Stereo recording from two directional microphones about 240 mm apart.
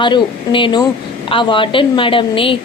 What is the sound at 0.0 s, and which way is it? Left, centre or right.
A woman's voice, centre.